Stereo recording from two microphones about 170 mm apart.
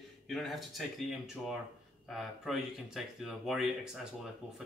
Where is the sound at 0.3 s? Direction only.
Centre (ahead or behind).